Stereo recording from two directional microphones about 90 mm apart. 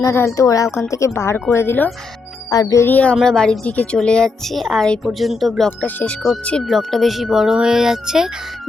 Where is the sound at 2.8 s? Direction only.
20° left (ahead or behind).